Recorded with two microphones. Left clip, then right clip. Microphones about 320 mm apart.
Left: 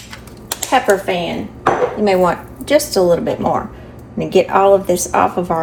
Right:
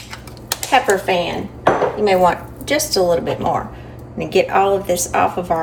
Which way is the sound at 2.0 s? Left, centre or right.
Centre.